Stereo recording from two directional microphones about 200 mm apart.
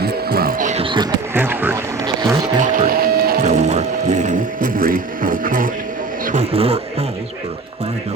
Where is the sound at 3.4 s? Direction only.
35° right (ahead or behind).